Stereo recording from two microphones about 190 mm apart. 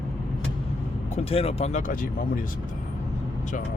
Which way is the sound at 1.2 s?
30° left (ahead or behind).